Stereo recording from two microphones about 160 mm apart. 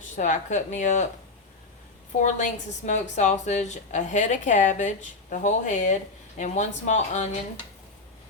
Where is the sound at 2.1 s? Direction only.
50° left (ahead or behind).